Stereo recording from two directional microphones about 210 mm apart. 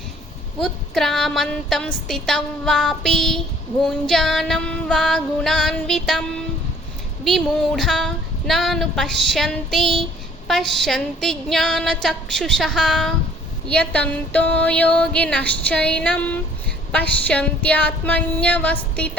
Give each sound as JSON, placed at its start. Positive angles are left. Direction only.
{"t": 0.6, "sound": "a woman's voice", "side_deg": 0}
{"t": 7.3, "sound": "a woman's voice", "side_deg": 0}
{"t": 16.9, "sound": "a sound", "side_deg": 5}